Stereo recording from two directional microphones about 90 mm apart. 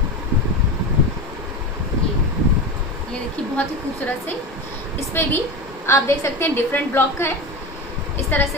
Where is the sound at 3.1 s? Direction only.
15° left (ahead or behind).